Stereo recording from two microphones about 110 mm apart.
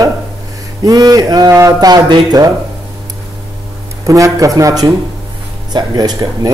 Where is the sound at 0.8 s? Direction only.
35° right (ahead or behind).